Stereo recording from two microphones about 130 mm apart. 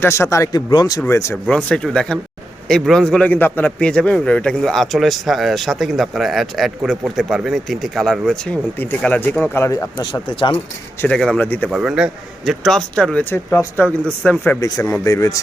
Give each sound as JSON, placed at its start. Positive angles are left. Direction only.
{"t": 0.0, "sound": "speech", "side_deg": 20}
{"t": 1.0, "sound": "speech", "side_deg": 20}
{"t": 1.5, "sound": "a man's voice", "side_deg": 10}
{"t": 8.8, "sound": "speech", "side_deg": 10}
{"t": 10.0, "sound": "speech", "side_deg": 35}
{"t": 11.0, "sound": "speech", "side_deg": 5}
{"t": 11.7, "sound": "a man's voice", "side_deg": -5}
{"t": 15.0, "sound": "speech", "side_deg": 25}